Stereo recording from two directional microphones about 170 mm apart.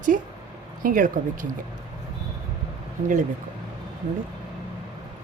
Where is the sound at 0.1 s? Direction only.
50° right (ahead or behind).